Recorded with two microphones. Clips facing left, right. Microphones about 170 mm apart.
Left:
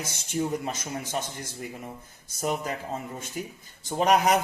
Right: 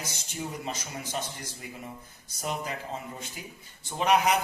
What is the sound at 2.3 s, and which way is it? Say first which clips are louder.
A man's voice: left 4 dB; 50° left (ahead or behind).